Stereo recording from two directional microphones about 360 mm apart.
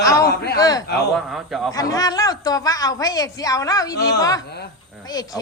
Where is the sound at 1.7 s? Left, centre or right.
Centre.